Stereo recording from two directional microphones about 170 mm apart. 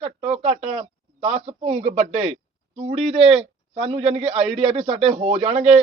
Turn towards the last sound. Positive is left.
turn(degrees=-40)  # may be behind; listen again after turning